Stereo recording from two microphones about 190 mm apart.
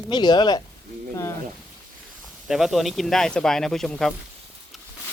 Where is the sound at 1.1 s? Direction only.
15° left (ahead or behind).